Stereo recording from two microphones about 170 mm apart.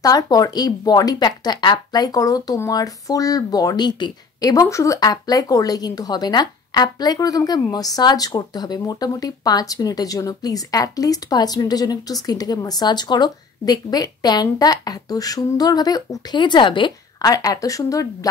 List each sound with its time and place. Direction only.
0.0 s speech: 20° left (ahead or behind)